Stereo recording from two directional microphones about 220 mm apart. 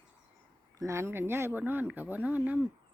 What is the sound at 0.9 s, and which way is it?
Speech, 10° right (ahead or behind).